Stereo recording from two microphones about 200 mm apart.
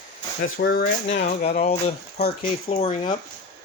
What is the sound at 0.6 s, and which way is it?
Speech, 50° left (ahead or behind).